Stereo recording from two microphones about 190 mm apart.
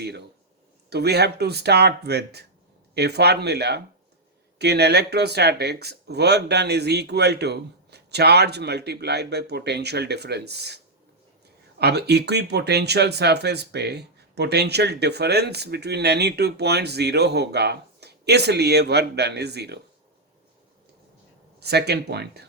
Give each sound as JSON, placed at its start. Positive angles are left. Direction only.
{"t": 0.9, "sound": "speech", "side_deg": -60}
{"t": 11.8, "sound": "speech", "side_deg": -60}
{"t": 21.6, "sound": "speech", "side_deg": -60}